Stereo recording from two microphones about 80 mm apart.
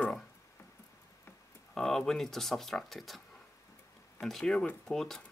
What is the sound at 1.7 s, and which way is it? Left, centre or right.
Speech, centre.